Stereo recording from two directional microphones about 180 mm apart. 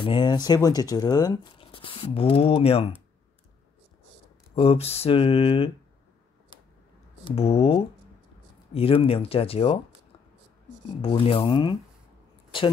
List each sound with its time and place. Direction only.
0.0 s speech: 25° left (ahead or behind)
4.6 s speech: 35° left (ahead or behind)
7.2 s speech: 35° left (ahead or behind)
11.0 s speech: 30° left (ahead or behind)